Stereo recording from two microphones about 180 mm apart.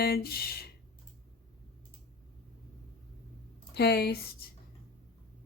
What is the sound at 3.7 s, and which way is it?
Speech, 65° left (ahead or behind).